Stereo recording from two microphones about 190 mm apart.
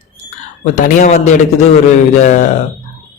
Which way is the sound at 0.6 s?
40° left (ahead or behind).